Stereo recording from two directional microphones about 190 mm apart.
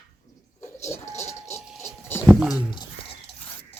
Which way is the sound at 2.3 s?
Centre (ahead or behind).